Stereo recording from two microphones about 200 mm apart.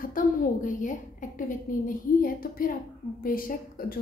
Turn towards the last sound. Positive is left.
turn(degrees=45)  # may be behind; listen again after turning